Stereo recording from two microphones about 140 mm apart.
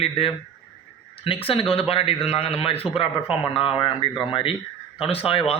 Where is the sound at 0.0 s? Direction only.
40° left (ahead or behind).